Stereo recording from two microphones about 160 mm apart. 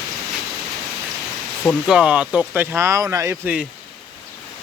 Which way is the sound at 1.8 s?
5° right (ahead or behind).